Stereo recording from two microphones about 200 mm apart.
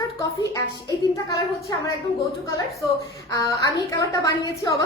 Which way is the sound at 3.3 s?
15° left (ahead or behind).